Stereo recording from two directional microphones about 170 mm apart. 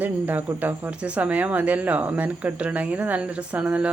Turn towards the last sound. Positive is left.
turn(degrees=-5)  # may be behind; listen again after turning